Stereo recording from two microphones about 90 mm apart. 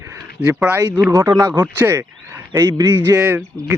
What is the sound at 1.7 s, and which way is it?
Speech, 25° right (ahead or behind).